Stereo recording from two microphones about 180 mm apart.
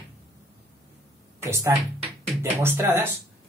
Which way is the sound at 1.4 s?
15° right (ahead or behind).